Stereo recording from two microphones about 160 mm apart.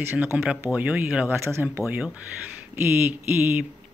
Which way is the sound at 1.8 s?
5° right (ahead or behind).